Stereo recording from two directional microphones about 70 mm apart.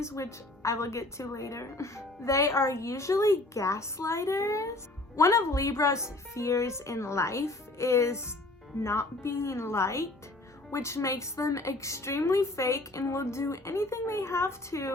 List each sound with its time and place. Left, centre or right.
0.0 s speech: left